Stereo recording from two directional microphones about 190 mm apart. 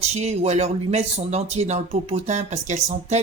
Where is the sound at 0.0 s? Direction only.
35° right (ahead or behind).